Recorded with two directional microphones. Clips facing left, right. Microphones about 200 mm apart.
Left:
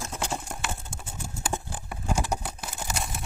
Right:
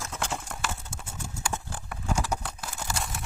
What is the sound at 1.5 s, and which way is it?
Clip-clop, 15° left (ahead or behind).